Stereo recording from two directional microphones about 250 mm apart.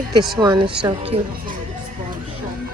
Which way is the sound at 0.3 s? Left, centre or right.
Centre.